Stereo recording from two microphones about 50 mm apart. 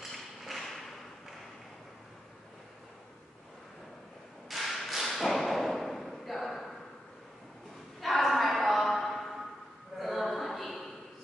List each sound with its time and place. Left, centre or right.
0.1 s thump: centre
4.5 s thump: centre
8.0 s a sound: centre